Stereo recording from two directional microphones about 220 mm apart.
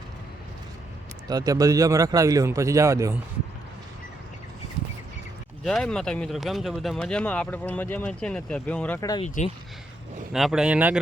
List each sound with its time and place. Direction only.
1.3 s speech: 15° right (ahead or behind)
5.6 s speech: centre (ahead or behind)
9.2 s speech: 35° left (ahead or behind)
10.3 s speech: centre (ahead or behind)